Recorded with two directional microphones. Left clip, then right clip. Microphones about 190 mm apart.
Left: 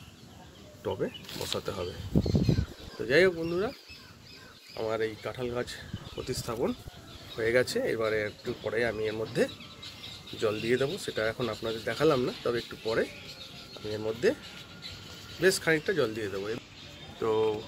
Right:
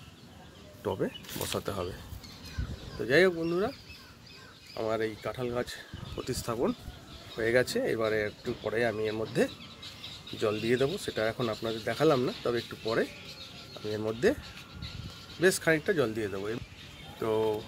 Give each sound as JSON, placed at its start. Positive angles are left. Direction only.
{"t": 0.8, "sound": "speech", "side_deg": -45}
{"t": 3.1, "sound": "speech", "side_deg": -45}
{"t": 4.7, "sound": "speech", "side_deg": -45}
{"t": 15.4, "sound": "speech", "side_deg": -55}
{"t": 17.2, "sound": "speech", "side_deg": -25}